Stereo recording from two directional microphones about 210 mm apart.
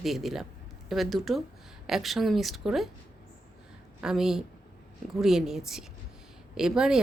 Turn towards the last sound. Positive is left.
turn(degrees=-5)  # may be behind; listen again after turning